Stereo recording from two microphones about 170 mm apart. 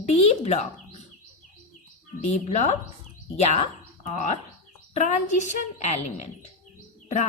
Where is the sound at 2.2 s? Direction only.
45° left (ahead or behind).